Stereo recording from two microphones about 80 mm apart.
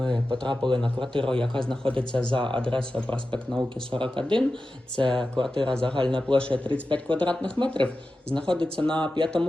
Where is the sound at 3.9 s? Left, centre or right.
Right.